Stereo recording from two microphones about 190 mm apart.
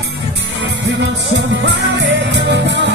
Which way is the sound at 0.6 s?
70° right (ahead or behind).